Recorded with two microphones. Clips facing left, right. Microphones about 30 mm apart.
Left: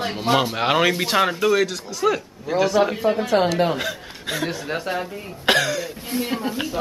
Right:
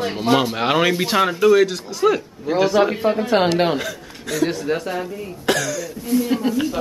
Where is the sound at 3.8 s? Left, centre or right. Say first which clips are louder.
Left 1 dB; left.